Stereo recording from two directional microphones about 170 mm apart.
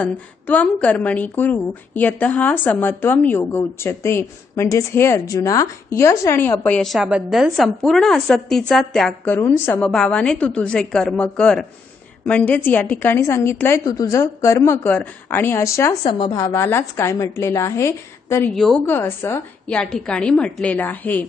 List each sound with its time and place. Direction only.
0.0 s a woman's voice: 10° left (ahead or behind)
16.0 s speech: 35° left (ahead or behind)
16.4 s a woman's voice: 15° left (ahead or behind)
18.5 s a woman's voice: centre (ahead or behind)
18.9 s a woman's voice: 10° left (ahead or behind)